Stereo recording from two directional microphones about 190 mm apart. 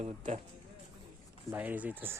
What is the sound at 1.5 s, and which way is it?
Speech, 10° right (ahead or behind).